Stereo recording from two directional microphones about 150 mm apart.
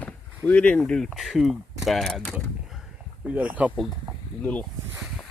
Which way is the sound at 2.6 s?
Centre (ahead or behind).